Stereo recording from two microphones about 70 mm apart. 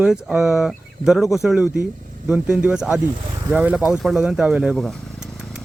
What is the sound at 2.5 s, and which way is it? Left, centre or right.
Speech, centre.